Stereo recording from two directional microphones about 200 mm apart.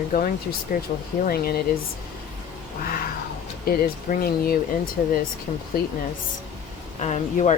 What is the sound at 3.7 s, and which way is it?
Speech, 45° left (ahead or behind).